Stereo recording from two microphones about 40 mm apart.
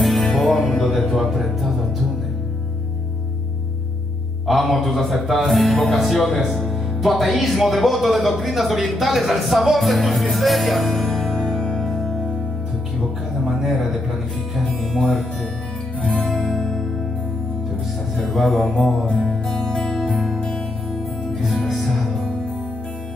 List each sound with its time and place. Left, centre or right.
0.0 s music: centre
0.8 s speech: centre
4.5 s speech: centre
11.1 s music: centre
13.5 s speech: centre
14.8 s music: centre
16.0 s music: left
16.5 s music: centre
18.2 s speech: centre
19.2 s music: centre
21.4 s music: centre